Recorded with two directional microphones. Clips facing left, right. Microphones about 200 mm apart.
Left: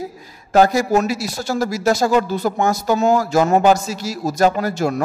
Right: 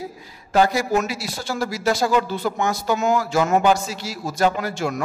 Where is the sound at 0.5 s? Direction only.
45° left (ahead or behind).